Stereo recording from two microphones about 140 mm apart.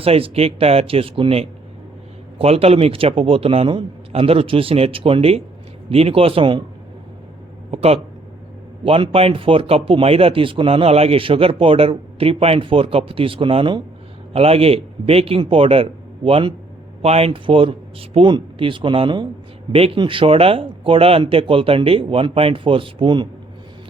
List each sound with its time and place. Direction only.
0.0 s a man's voice: 45° right (ahead or behind)
7.7 s a man's voice: 45° right (ahead or behind)